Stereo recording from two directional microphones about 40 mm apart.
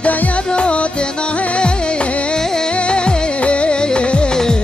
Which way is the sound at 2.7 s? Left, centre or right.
Left.